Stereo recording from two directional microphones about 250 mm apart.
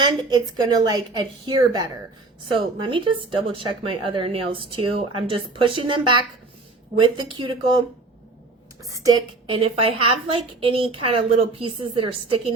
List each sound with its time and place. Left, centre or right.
0.0 s a woman's voice: centre
8.8 s speech: centre